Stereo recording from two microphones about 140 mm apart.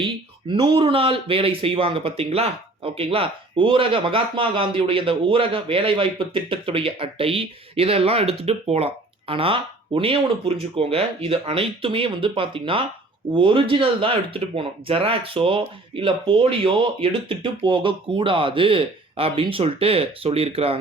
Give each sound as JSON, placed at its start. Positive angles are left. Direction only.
{"t": 0.0, "sound": "speech", "side_deg": -35}